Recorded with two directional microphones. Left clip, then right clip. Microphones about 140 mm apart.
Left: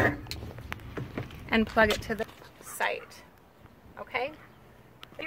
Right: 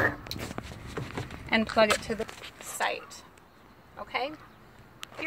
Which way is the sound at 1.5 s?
35° left (ahead or behind).